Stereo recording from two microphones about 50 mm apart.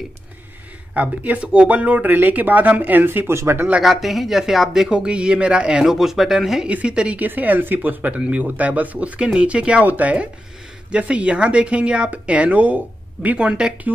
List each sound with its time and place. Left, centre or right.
0.9 s speech: right
3.3 s speech: right
3.8 s speech: centre
4.9 s speech: right
5.9 s speech: centre
6.7 s speech: right
7.2 s speech: right